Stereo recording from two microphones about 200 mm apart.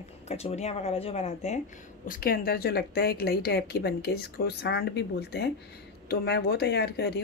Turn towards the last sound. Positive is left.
turn(degrees=55)  # may be behind; listen again after turning